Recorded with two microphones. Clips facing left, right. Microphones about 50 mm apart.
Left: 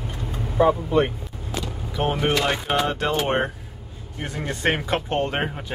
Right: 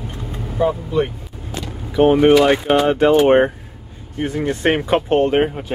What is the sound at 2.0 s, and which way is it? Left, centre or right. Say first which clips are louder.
Speech: right 11 dB; centre.